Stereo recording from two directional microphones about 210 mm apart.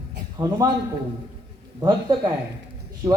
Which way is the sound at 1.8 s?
20° right (ahead or behind).